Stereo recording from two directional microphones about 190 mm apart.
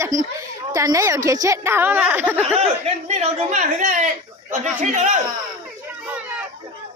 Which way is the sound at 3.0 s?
35° right (ahead or behind).